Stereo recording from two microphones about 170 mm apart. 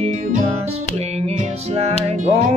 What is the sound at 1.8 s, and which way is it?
Music, 40° right (ahead or behind).